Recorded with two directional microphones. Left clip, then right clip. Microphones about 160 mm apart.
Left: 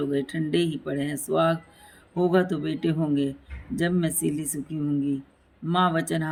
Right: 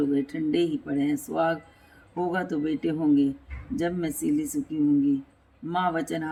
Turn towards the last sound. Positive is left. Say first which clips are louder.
# left 3 dB
turn(degrees=40)  # may be behind; listen again after turning